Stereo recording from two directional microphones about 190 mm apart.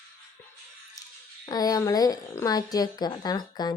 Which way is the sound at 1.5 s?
20° left (ahead or behind).